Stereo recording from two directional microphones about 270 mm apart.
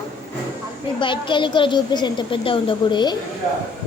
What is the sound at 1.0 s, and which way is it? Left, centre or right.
A woman's voice, centre.